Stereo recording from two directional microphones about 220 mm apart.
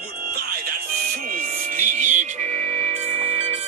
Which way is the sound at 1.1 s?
40° right (ahead or behind).